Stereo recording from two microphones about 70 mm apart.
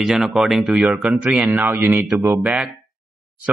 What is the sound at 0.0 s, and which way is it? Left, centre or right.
A man's voice, centre.